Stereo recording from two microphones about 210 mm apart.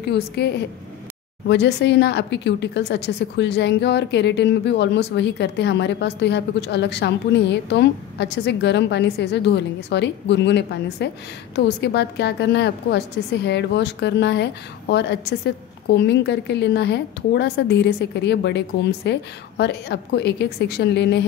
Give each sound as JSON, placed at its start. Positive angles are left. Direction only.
{"t": 0.4, "sound": "a woman's voice", "side_deg": 55}